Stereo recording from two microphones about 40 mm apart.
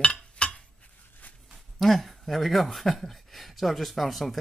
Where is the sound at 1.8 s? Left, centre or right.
Centre.